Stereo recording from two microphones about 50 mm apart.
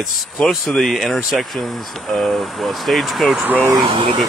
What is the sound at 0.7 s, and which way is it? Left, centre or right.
Speech, centre.